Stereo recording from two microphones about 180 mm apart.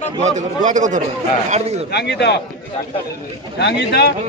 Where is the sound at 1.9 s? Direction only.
70° left (ahead or behind).